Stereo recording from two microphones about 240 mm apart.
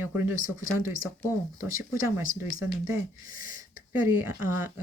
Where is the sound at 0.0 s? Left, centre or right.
Centre.